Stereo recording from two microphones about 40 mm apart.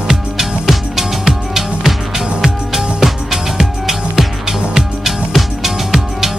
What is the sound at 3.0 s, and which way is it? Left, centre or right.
Music, centre.